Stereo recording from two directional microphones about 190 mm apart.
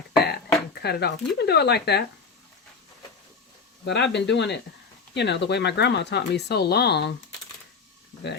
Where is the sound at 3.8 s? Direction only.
65° left (ahead or behind).